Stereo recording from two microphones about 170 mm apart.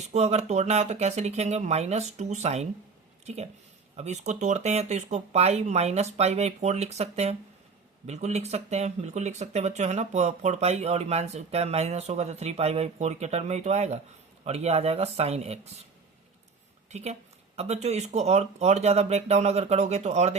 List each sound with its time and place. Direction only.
0.0 s speech: 40° right (ahead or behind)
16.9 s speech: 40° right (ahead or behind)